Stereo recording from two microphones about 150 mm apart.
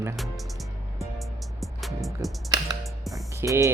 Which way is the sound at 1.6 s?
Centre (ahead or behind).